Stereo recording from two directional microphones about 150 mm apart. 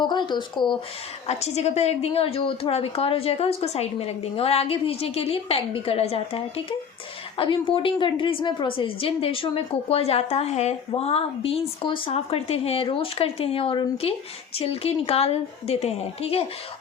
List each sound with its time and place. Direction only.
0.0 s a woman's voice: 30° left (ahead or behind)
1.3 s a woman's voice: 45° left (ahead or behind)